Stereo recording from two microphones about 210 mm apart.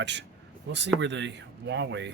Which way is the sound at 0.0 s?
55° right (ahead or behind).